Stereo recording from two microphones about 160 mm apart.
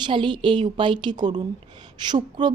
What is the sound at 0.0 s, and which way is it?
A woman's voice, 30° right (ahead or behind).